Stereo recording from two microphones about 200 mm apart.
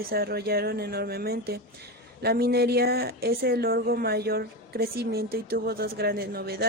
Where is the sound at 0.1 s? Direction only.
50° right (ahead or behind).